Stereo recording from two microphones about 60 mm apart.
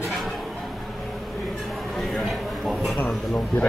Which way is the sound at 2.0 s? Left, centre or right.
Centre.